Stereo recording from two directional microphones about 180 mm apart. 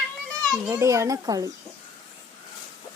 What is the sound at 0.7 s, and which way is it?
Speech, 15° right (ahead or behind).